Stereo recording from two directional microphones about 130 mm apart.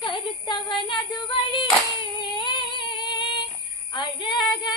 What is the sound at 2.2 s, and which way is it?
Female singing, 35° left (ahead or behind).